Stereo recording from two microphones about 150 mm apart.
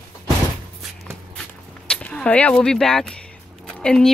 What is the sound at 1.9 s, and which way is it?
Speech, 5° left (ahead or behind).